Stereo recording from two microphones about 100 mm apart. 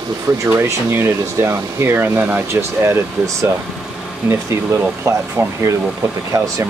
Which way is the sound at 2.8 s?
25° right (ahead or behind).